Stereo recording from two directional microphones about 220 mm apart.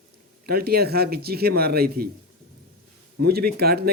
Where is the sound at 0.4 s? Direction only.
45° right (ahead or behind).